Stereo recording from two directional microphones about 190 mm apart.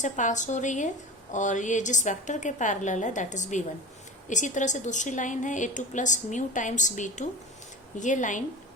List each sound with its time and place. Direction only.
0.0 s a woman's voice: 40° left (ahead or behind)